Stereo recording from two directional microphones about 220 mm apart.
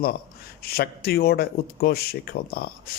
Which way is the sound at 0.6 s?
45° left (ahead or behind).